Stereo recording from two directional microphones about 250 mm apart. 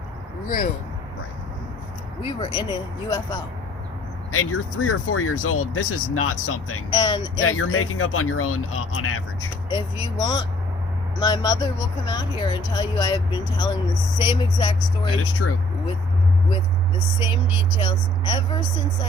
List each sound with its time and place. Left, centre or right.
2.2 s speech: centre
4.3 s speech: left
6.9 s speech: centre
7.4 s speech: left
9.6 s speech: centre
15.4 s speech: left
17.7 s speech: centre